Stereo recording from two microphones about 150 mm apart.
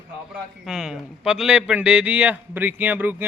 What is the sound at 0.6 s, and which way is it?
A man's voice, 5° right (ahead or behind).